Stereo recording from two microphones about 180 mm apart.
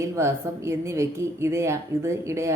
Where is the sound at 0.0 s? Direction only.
15° right (ahead or behind).